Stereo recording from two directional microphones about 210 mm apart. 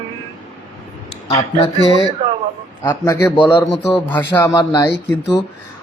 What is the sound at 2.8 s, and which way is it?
Speech, 15° left (ahead or behind).